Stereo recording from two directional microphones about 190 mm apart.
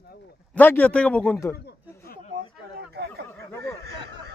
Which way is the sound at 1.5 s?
55° left (ahead or behind).